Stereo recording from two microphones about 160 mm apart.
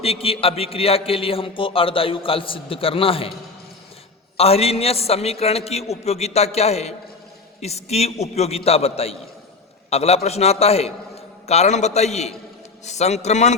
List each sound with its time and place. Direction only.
0.0 s a man's voice: 35° left (ahead or behind)
4.4 s a man's voice: 40° left (ahead or behind)